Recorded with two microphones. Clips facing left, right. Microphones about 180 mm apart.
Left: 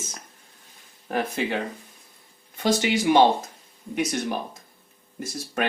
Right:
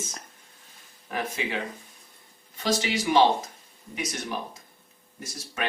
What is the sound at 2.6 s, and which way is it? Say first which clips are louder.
Speech: left 5 dB; 55° left (ahead or behind).